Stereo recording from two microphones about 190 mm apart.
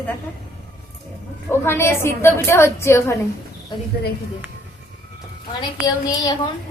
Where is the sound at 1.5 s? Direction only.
15° left (ahead or behind).